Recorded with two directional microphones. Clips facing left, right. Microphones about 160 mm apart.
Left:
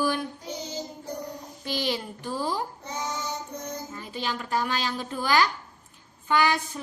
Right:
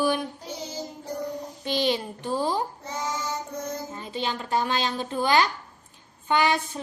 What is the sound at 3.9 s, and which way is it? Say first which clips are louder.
A child's voice: right 2 dB; 25° right (ahead or behind).